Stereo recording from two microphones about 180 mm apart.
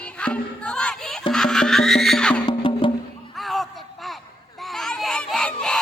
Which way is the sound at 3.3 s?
Centre (ahead or behind).